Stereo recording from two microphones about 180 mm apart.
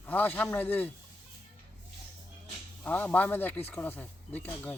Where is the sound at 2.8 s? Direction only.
10° left (ahead or behind).